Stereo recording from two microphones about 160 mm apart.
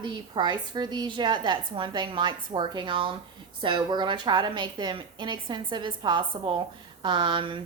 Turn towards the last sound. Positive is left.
turn(degrees=-30)  # may be behind; listen again after turning